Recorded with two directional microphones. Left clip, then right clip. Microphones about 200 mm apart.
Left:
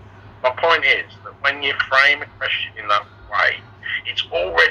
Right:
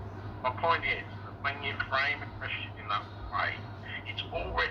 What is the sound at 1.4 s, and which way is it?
A man's voice, 50° left (ahead or behind).